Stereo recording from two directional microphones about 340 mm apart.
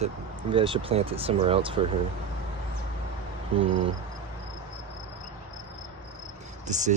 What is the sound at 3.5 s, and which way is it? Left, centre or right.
Speech, centre.